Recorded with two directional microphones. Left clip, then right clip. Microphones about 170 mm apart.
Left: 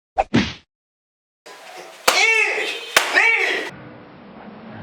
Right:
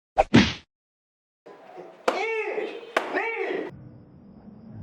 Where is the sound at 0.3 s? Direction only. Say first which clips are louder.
Right 1 dB; centre (ahead or behind).